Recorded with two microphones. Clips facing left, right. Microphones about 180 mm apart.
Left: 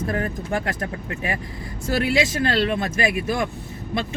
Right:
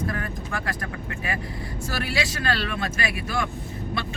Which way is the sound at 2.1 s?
20° left (ahead or behind).